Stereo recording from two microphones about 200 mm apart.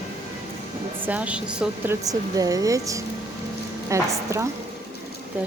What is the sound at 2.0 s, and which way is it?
Speech, 20° right (ahead or behind).